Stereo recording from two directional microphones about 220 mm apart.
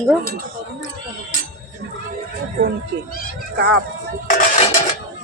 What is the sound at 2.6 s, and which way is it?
Speech, 45° right (ahead or behind).